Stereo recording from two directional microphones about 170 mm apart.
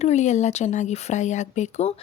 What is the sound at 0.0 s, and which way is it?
Speech, 40° left (ahead or behind).